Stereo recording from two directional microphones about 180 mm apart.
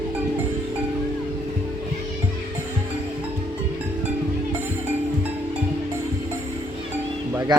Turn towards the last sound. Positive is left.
turn(degrees=-15)  # may be behind; listen again after turning